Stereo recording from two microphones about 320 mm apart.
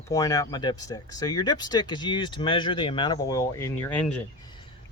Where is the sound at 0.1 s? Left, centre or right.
Centre.